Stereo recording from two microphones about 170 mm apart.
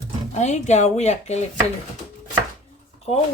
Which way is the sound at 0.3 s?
45° left (ahead or behind).